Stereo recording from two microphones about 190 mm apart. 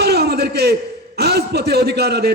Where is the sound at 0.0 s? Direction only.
55° right (ahead or behind).